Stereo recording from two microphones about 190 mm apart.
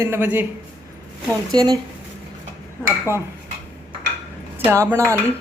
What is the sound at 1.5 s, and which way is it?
Speech, 20° right (ahead or behind).